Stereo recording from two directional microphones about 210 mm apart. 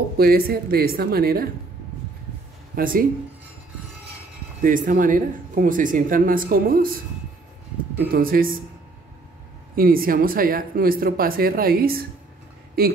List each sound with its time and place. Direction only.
0.2 s speech: 45° right (ahead or behind)
2.7 s speech: 45° right (ahead or behind)
4.6 s speech: 40° right (ahead or behind)
8.1 s speech: 45° right (ahead or behind)
9.8 s speech: 45° right (ahead or behind)